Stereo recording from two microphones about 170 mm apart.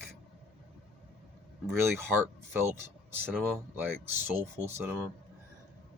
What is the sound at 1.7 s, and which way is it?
Speech, 15° right (ahead or behind).